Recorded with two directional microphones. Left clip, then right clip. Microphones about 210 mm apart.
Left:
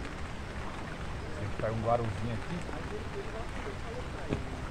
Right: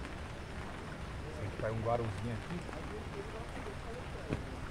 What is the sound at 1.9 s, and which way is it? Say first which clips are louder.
Speech: left 6 dB; 15° right (ahead or behind).